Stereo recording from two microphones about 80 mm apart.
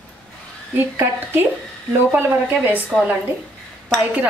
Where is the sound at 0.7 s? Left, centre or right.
Right.